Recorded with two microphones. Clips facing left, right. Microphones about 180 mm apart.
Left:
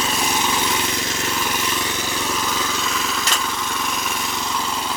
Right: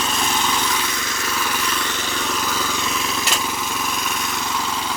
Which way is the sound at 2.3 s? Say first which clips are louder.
Even; centre (ahead or behind).